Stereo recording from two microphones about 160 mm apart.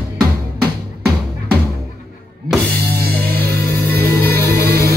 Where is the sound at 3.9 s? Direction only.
75° right (ahead or behind).